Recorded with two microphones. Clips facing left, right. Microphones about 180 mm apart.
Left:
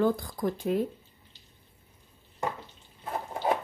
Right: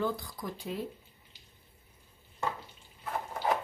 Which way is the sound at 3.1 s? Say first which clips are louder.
Left 3 dB; 30° left (ahead or behind).